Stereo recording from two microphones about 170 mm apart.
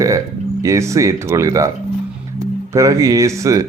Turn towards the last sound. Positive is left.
turn(degrees=-20)  # may be behind; listen again after turning